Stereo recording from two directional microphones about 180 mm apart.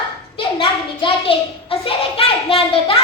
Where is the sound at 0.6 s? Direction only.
30° left (ahead or behind).